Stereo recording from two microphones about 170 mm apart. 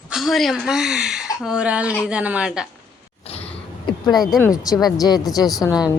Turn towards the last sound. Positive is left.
turn(degrees=25)  # may be behind; listen again after turning